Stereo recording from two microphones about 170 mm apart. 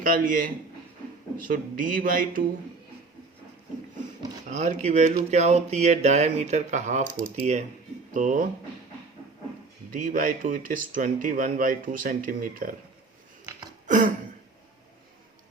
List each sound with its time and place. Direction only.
0.0 s a man's voice: 55° right (ahead or behind)
4.4 s speech: 45° right (ahead or behind)
9.9 s speech: 50° right (ahead or behind)
13.8 s a sound: 50° right (ahead or behind)